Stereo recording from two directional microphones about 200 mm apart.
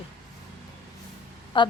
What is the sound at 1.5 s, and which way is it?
Speech, 25° left (ahead or behind).